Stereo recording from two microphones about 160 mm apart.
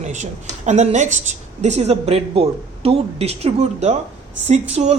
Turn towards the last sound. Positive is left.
turn(degrees=-45)  # may be behind; listen again after turning